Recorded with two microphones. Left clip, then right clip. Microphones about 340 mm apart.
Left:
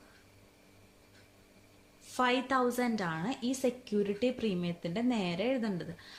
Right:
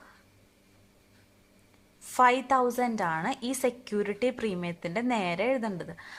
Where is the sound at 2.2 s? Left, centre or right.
Centre.